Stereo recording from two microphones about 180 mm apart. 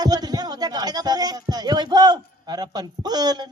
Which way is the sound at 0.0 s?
20° right (ahead or behind).